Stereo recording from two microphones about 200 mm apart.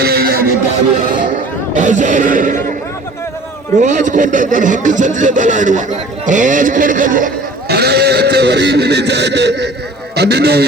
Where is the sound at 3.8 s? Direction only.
40° right (ahead or behind).